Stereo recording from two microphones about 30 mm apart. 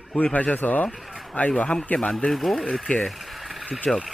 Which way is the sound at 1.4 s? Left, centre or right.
Left.